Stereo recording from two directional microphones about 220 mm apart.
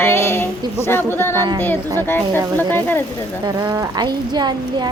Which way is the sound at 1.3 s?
15° right (ahead or behind).